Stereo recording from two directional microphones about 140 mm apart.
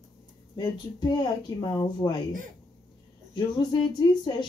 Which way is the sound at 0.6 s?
30° left (ahead or behind).